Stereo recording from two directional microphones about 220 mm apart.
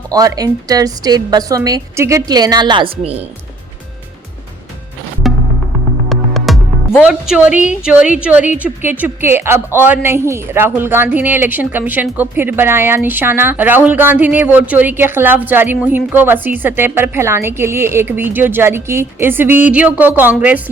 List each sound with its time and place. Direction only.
0.1 s a woman's voice: 15° right (ahead or behind)
5.2 s music: centre (ahead or behind)
7.8 s a woman's voice: 5° right (ahead or behind)